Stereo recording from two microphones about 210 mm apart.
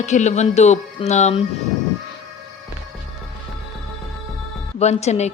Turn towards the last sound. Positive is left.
turn(degrees=30)  # may be behind; listen again after turning